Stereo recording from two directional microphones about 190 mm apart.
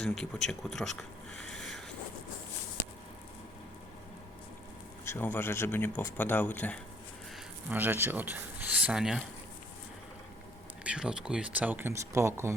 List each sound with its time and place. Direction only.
0.0 s speech: 5° left (ahead or behind)
5.0 s speech: 10° left (ahead or behind)
7.7 s speech: 10° right (ahead or behind)
10.8 s speech: 5° right (ahead or behind)